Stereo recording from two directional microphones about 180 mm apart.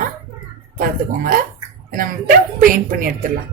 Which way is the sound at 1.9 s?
50° right (ahead or behind).